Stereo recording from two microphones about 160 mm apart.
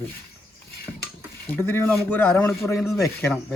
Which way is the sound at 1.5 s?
15° left (ahead or behind).